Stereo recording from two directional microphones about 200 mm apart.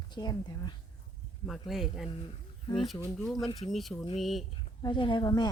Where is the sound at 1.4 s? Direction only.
Centre (ahead or behind).